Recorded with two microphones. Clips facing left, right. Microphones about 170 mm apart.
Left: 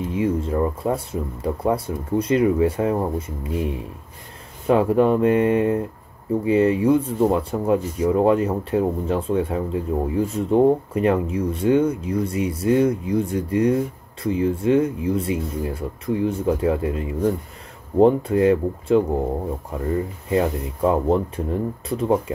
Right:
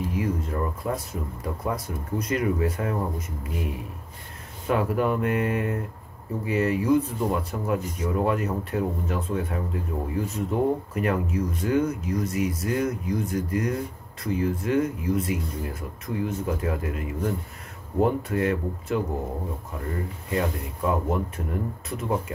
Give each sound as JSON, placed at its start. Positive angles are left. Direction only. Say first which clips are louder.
{"t": 0.0, "sound": "speech", "louder": "left 5 dB", "side_deg": 25}
{"t": 20.2, "sound": "speech", "louder": "left 6 dB", "side_deg": 25}